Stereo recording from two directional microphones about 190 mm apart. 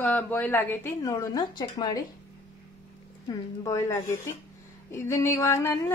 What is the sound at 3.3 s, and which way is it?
Speech, 15° left (ahead or behind).